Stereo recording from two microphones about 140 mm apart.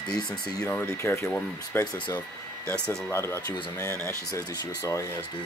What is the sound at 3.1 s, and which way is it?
Speech, 20° left (ahead or behind).